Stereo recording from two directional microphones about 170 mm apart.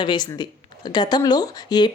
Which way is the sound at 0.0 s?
25° left (ahead or behind).